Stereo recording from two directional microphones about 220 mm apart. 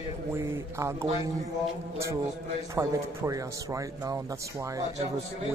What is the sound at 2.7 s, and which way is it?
Speech, 15° right (ahead or behind).